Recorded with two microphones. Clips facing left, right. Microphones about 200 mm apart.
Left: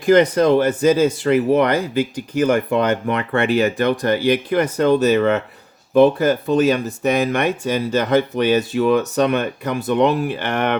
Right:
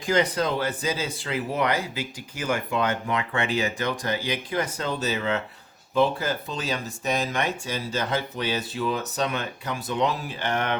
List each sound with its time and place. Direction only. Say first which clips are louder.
0.0 s speech: left 10 dB; 55° left (ahead or behind)